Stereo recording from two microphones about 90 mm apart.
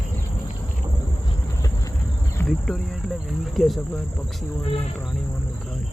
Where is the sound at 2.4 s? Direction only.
5° left (ahead or behind).